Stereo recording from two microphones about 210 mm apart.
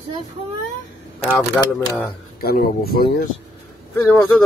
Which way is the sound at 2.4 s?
45° left (ahead or behind).